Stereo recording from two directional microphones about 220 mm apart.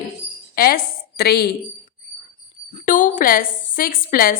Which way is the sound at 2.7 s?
35° left (ahead or behind).